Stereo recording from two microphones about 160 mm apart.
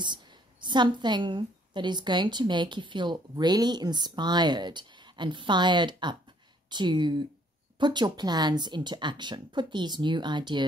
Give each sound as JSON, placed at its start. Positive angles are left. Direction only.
{"t": 0.0, "sound": "a woman's voice", "side_deg": -30}